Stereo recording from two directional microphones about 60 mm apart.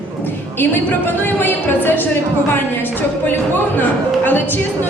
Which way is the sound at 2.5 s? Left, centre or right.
Left.